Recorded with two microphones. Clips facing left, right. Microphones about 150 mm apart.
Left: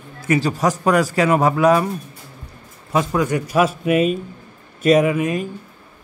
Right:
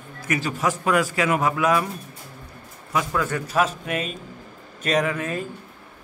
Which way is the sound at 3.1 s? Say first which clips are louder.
Left 4 dB; 15° left (ahead or behind).